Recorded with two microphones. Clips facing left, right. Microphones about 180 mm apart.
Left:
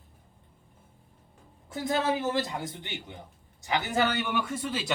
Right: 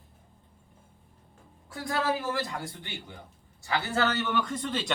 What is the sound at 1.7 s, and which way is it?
A man's voice, 20° left (ahead or behind).